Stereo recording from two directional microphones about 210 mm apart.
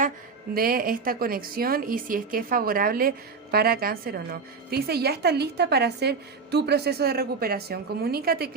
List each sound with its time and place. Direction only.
0.5 s speech: 45° right (ahead or behind)